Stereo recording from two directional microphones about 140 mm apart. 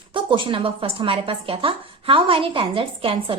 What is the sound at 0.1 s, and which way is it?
A woman's voice, 35° right (ahead or behind).